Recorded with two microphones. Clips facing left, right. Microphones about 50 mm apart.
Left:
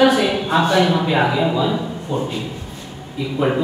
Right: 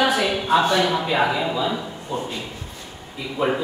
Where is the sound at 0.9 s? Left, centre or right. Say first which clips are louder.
Left 3 dB; centre.